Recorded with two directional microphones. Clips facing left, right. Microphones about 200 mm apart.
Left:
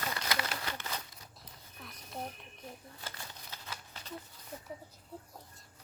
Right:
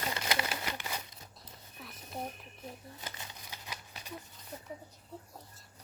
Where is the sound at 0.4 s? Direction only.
15° right (ahead or behind).